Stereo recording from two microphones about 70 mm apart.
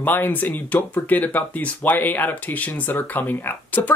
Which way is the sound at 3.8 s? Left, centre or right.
Left.